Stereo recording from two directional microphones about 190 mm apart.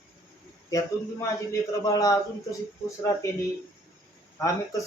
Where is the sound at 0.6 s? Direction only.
20° left (ahead or behind).